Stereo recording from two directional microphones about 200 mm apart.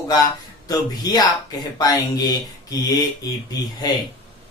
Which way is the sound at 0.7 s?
20° left (ahead or behind).